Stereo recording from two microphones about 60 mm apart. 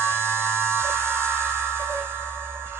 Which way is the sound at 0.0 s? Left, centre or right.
Right.